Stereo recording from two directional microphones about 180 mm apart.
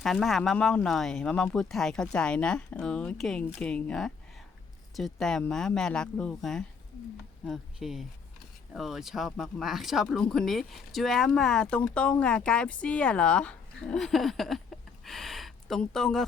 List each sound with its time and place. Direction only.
0.0 s speech: centre (ahead or behind)